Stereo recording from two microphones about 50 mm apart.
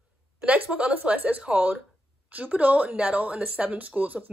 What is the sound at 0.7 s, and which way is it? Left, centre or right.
Speech, right.